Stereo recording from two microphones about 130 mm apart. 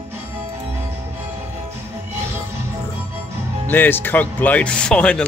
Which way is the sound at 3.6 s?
15° left (ahead or behind).